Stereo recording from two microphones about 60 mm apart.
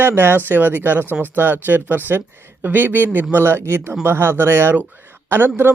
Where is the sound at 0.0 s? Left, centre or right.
Right.